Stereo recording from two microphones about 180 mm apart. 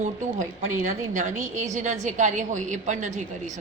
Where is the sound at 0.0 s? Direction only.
45° right (ahead or behind).